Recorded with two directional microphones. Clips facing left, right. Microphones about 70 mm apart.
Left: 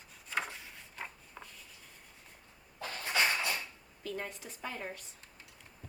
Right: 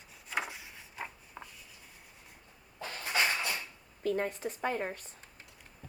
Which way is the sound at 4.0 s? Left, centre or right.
Right.